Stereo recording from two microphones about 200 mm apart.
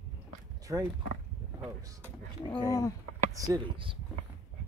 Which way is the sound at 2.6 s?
15° left (ahead or behind).